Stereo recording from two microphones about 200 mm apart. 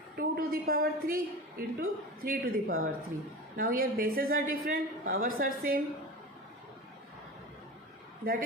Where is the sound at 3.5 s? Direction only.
45° right (ahead or behind).